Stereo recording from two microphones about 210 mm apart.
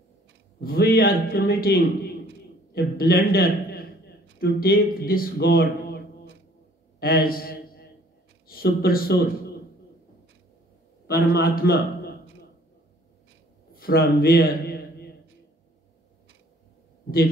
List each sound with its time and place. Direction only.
0.6 s a man's voice: 45° left (ahead or behind)
7.0 s a man's voice: 45° left (ahead or behind)
11.1 s a man's voice: 45° left (ahead or behind)
13.7 s a man's voice: 45° left (ahead or behind)